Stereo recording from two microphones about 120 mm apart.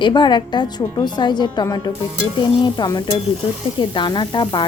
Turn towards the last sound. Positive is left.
turn(degrees=40)  # may be behind; listen again after turning